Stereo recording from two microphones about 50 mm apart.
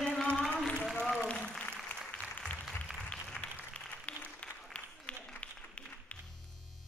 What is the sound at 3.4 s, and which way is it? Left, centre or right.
Applause, centre.